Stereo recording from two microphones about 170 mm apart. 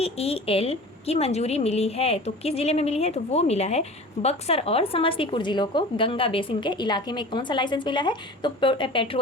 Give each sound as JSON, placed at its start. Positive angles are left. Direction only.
{"t": 0.0, "sound": "a woman's voice", "side_deg": 35}